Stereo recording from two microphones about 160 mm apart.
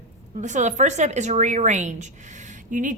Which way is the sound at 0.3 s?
50° right (ahead or behind).